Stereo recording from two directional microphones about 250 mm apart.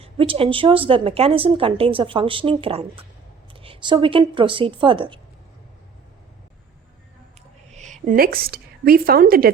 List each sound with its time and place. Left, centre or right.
0.0 s speech: right
7.7 s a woman's voice: right